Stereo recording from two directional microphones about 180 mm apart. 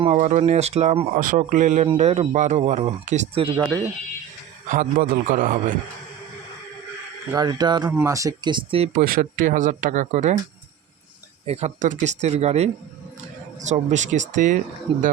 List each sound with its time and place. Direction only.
0.0 s speech: 40° right (ahead or behind)
4.7 s speech: 50° right (ahead or behind)
7.3 s speech: 20° right (ahead or behind)
9.0 s speech: 50° right (ahead or behind)
11.4 s speech: 35° right (ahead or behind)